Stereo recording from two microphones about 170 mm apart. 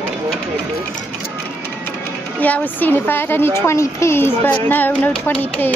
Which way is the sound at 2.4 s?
10° left (ahead or behind).